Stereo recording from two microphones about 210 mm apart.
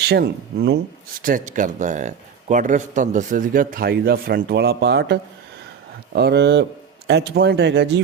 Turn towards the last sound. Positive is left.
turn(degrees=-55)  # may be behind; listen again after turning